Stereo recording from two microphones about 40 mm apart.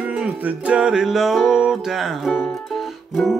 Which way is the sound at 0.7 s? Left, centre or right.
Centre.